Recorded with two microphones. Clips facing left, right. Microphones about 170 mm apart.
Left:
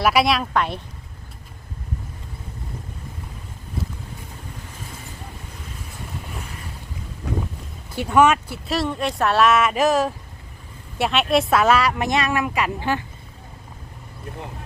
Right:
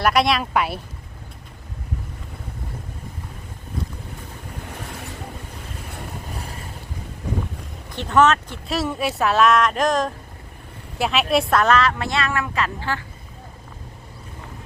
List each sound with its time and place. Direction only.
0.0 s speech: centre (ahead or behind)
7.9 s speech: 10° left (ahead or behind)